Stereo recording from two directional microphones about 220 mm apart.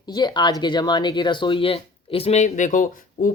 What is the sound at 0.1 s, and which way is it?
Speech, 20° left (ahead or behind).